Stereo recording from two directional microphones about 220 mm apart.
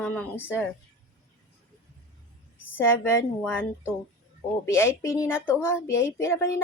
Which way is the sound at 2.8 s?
10° left (ahead or behind).